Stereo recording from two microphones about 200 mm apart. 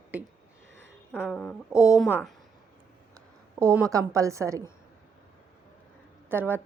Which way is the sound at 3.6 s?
15° right (ahead or behind).